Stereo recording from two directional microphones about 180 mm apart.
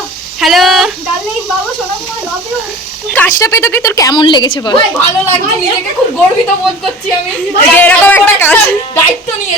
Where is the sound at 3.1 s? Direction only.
10° left (ahead or behind).